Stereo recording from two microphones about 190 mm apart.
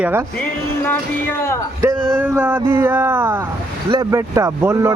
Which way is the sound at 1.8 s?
20° right (ahead or behind).